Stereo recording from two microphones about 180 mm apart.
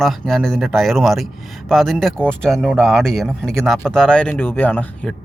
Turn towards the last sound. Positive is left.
turn(degrees=10)  # may be behind; listen again after turning